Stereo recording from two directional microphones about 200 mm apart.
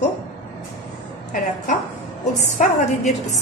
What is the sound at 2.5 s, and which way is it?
Speech, 35° left (ahead or behind).